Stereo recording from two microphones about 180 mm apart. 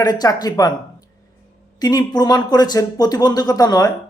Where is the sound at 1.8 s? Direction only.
20° left (ahead or behind).